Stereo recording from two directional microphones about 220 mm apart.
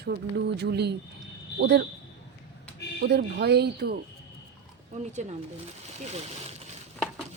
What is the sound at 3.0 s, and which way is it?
Speech, 50° right (ahead or behind).